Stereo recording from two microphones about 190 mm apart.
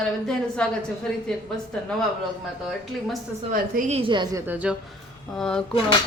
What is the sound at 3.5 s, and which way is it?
A woman's voice, 40° right (ahead or behind).